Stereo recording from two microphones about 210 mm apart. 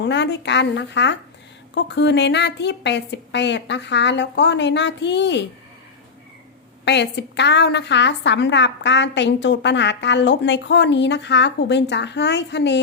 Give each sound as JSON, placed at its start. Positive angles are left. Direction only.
{"t": 0.0, "sound": "a woman's voice", "side_deg": 55}
{"t": 6.8, "sound": "a woman's voice", "side_deg": 55}